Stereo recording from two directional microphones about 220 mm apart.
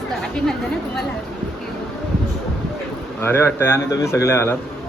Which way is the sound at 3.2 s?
10° left (ahead or behind).